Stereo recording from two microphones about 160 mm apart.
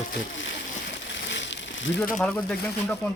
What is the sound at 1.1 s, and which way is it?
Crushing, 90° left.